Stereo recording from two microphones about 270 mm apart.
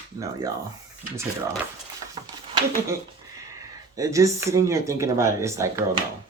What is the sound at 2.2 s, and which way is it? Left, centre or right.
Speech, centre.